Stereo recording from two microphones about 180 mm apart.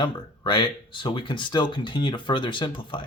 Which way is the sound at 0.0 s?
25° left (ahead or behind).